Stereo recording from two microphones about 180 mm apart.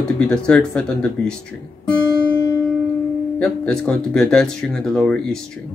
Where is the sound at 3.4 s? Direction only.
5° left (ahead or behind).